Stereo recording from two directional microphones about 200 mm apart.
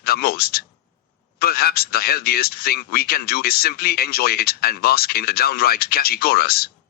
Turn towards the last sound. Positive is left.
turn(degrees=50)  # may be behind; listen again after turning